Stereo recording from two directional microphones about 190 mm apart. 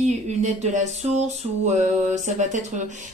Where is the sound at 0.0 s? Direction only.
35° right (ahead or behind).